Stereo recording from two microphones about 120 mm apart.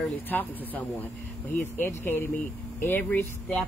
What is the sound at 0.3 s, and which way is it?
Speech, 15° left (ahead or behind).